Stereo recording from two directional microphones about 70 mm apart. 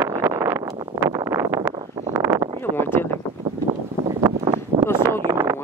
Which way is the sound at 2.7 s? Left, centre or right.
Left.